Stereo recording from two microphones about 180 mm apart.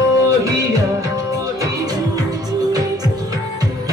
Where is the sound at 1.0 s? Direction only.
20° right (ahead or behind).